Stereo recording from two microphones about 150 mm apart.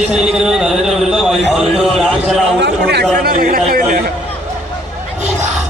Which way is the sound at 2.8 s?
90° right.